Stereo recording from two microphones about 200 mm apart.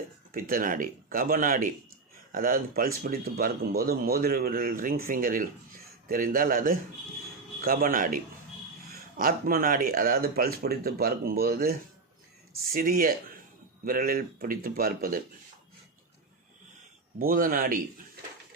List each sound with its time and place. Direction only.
0.3 s speech: 45° right (ahead or behind)
17.2 s speech: 45° right (ahead or behind)